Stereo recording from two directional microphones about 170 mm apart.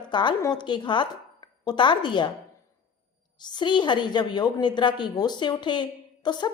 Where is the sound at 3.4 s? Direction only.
25° left (ahead or behind).